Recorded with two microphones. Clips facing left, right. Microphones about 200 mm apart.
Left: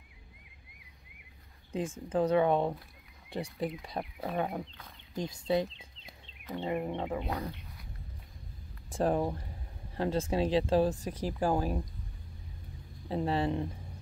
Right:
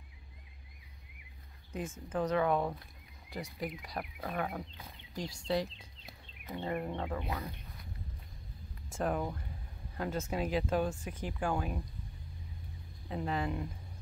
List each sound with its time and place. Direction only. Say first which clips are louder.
1.7 s speech: left 5 dB; 30° left (ahead or behind)
6.5 s wild animals: left 3 dB; 15° left (ahead or behind)
8.9 s speech: left 5 dB; 30° left (ahead or behind)
13.1 s speech: left 5 dB; 30° left (ahead or behind)